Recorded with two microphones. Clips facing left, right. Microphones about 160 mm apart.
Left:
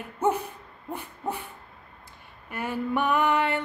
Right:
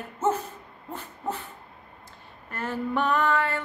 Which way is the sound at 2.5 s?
10° left (ahead or behind).